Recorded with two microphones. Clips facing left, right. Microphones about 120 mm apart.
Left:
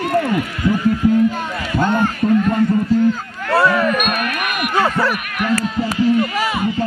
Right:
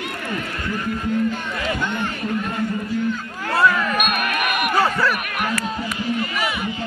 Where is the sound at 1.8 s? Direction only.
40° left (ahead or behind).